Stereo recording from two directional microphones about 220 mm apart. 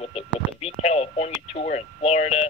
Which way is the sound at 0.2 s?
25° left (ahead or behind).